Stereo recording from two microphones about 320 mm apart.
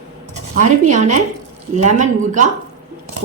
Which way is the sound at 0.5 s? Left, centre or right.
Right.